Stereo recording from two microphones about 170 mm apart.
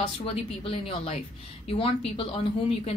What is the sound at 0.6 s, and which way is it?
A woman's voice, 35° left (ahead or behind).